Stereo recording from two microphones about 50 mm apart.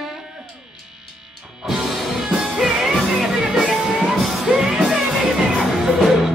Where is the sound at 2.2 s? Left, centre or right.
Centre.